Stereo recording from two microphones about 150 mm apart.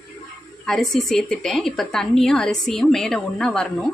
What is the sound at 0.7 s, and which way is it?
A woman's voice, centre (ahead or behind).